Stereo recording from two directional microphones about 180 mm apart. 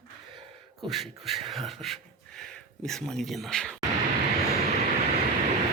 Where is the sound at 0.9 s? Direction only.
Centre (ahead or behind).